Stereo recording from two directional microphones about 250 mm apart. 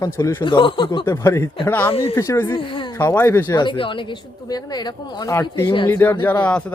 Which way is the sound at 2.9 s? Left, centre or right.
Centre.